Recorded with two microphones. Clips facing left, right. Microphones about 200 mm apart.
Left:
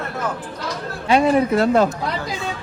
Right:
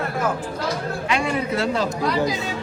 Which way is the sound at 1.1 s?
40° left (ahead or behind).